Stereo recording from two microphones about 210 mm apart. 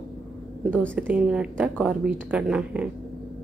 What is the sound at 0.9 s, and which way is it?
A woman's voice, 5° right (ahead or behind).